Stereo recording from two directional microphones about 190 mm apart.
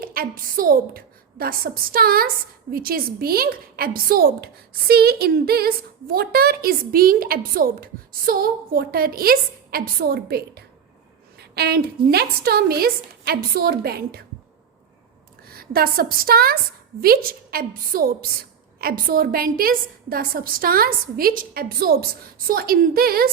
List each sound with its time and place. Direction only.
0.0 s a woman's voice: 50° right (ahead or behind)
11.3 s a sound: 55° right (ahead or behind)
12.1 s a woman's voice: 55° right (ahead or behind)
15.4 s a woman's voice: 50° right (ahead or behind)